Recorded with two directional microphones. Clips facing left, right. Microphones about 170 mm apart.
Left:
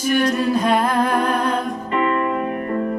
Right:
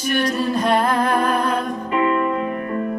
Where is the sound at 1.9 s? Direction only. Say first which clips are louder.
Right 1 dB; 10° right (ahead or behind).